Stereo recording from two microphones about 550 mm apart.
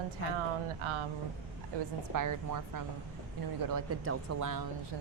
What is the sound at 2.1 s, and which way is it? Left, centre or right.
Speech, right.